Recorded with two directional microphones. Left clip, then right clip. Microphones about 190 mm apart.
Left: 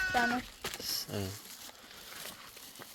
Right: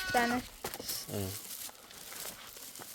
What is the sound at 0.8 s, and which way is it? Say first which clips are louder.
Speech: left 3 dB; 10° right (ahead or behind).